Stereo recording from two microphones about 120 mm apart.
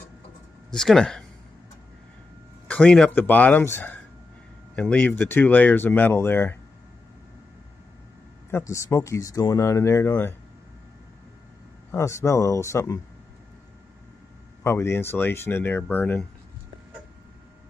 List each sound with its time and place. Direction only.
0.7 s speech: 5° left (ahead or behind)
2.7 s speech: 10° left (ahead or behind)
8.5 s speech: 20° left (ahead or behind)
11.9 s speech: 25° left (ahead or behind)
14.6 s speech: 20° left (ahead or behind)